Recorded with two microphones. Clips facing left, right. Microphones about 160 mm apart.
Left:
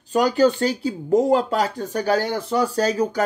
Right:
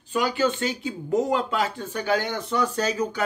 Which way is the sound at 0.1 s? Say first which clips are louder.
Left 6 dB; 40° left (ahead or behind).